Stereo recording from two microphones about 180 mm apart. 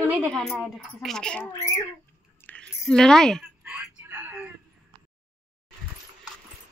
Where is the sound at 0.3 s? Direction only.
Centre (ahead or behind).